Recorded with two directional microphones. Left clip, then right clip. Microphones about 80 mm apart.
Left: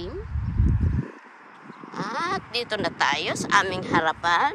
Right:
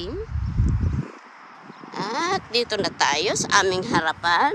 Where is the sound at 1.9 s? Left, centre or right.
Right.